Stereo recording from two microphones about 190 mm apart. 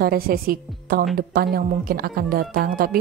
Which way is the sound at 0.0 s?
50° right (ahead or behind).